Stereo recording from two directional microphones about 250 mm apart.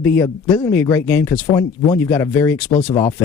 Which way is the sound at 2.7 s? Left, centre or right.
Left.